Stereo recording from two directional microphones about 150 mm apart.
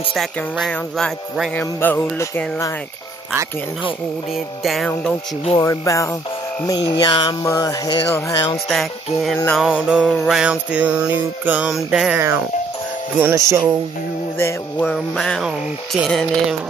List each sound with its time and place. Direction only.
0.1 s music: centre (ahead or behind)
1.5 s music: 10° left (ahead or behind)
4.6 s music: centre (ahead or behind)
5.6 s music: 20° left (ahead or behind)
8.6 s music: centre (ahead or behind)
12.2 s music: 15° right (ahead or behind)
13.2 s speech: 20° right (ahead or behind)
14.4 s music: 10° left (ahead or behind)